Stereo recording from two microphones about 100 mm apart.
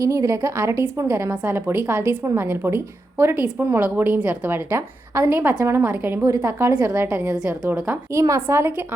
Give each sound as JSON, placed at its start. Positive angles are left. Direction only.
{"t": 0.0, "sound": "a woman's voice", "side_deg": -30}